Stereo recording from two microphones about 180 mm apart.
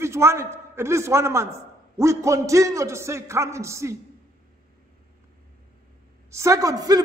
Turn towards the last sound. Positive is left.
turn(degrees=-20)  # may be behind; listen again after turning